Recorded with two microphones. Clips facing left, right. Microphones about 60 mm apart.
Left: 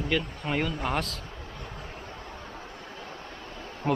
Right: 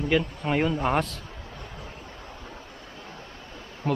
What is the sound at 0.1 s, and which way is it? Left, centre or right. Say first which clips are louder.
A man's voice: right 5 dB; centre.